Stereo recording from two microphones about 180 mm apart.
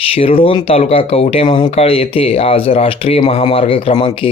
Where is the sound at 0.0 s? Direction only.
35° left (ahead or behind).